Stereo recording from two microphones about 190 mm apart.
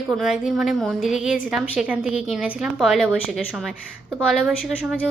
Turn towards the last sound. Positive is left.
turn(degrees=0)  # may be behind; listen again after turning